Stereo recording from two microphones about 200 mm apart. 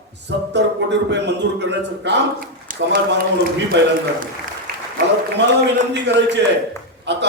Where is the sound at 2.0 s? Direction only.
45° right (ahead or behind).